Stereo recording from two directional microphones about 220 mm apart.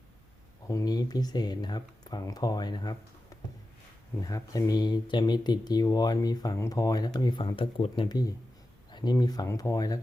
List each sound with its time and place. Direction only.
0.7 s speech: 15° left (ahead or behind)
4.2 s speech: 15° left (ahead or behind)